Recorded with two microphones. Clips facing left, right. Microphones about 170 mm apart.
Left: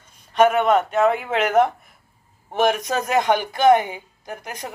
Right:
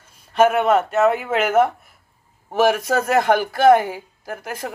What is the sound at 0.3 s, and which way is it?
Speech, 5° right (ahead or behind).